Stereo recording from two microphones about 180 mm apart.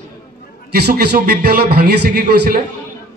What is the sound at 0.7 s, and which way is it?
A man's voice, 60° right (ahead or behind).